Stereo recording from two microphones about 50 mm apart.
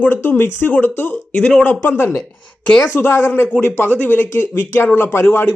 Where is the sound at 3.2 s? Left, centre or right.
Left.